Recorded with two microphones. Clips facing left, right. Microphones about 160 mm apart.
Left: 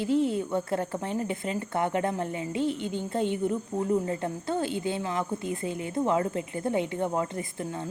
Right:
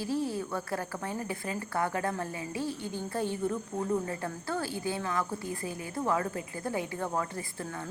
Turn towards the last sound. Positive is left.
turn(degrees=20)  # may be behind; listen again after turning